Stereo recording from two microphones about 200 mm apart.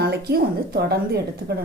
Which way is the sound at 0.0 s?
50° right (ahead or behind).